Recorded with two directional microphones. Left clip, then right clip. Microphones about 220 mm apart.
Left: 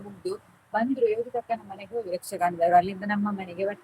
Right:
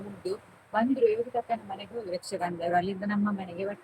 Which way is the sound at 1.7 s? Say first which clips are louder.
Left 3 dB; 10° left (ahead or behind).